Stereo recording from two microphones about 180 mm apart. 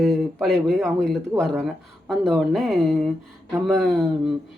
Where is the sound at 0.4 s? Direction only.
5° left (ahead or behind).